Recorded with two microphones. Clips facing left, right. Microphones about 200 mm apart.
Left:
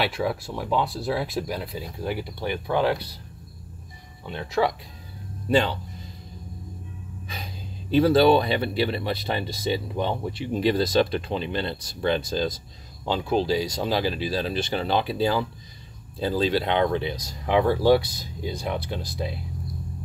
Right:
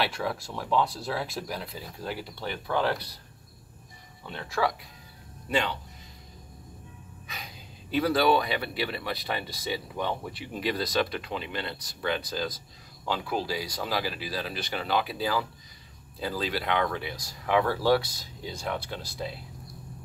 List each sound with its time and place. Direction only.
0.0 s speech: 15° left (ahead or behind)
4.3 s speech: 20° left (ahead or behind)
5.5 s speech: 35° left (ahead or behind)
7.2 s speech: 30° left (ahead or behind)